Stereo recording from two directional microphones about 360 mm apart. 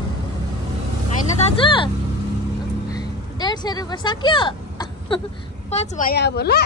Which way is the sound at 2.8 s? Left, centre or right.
Centre.